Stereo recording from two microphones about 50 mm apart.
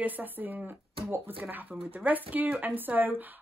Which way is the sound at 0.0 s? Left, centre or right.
Right.